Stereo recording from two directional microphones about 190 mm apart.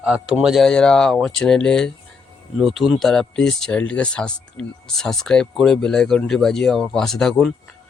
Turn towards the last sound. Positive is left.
turn(degrees=0)  # may be behind; listen again after turning